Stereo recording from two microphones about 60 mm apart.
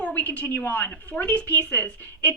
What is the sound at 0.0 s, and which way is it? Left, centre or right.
A woman's voice, left.